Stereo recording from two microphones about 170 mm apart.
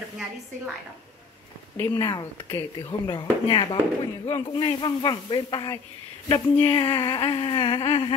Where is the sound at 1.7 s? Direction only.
15° left (ahead or behind).